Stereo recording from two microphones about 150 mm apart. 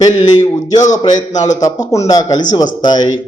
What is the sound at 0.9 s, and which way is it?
A man's voice, 25° left (ahead or behind).